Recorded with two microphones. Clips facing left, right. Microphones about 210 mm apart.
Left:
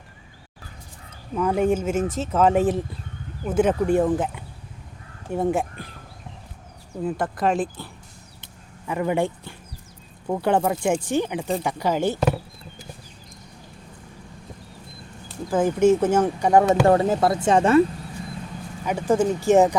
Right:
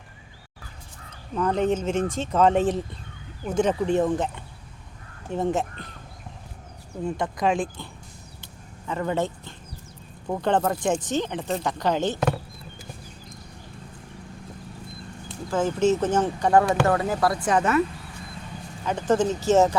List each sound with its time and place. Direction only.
1.4 s speech: 10° left (ahead or behind)
7.0 s speech: 5° left (ahead or behind)
8.9 s speech: 15° left (ahead or behind)
15.5 s speech: 15° left (ahead or behind)
16.8 s speech: 30° left (ahead or behind)
18.9 s speech: 10° left (ahead or behind)